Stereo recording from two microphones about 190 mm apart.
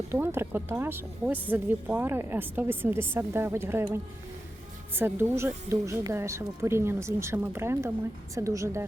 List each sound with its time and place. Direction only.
0.1 s speech: 15° right (ahead or behind)
4.9 s speech: 10° right (ahead or behind)